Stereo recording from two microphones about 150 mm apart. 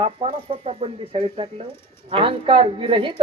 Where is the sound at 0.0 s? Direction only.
45° right (ahead or behind).